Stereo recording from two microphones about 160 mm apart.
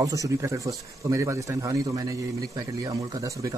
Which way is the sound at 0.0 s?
20° right (ahead or behind).